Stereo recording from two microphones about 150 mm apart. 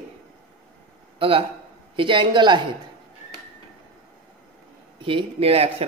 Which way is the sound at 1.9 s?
35° right (ahead or behind).